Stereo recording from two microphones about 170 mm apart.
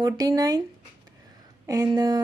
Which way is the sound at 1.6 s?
20° right (ahead or behind).